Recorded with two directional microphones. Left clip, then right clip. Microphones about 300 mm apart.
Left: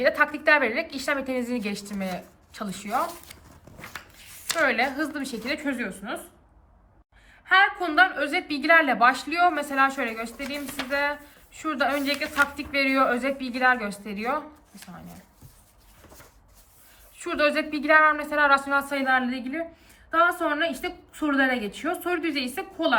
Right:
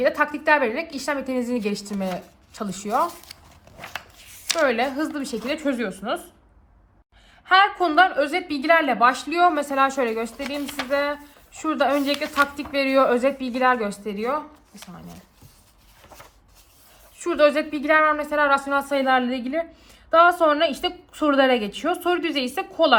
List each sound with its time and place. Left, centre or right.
0.0 s a woman's voice: centre
7.4 s a woman's voice: centre
17.2 s a woman's voice: centre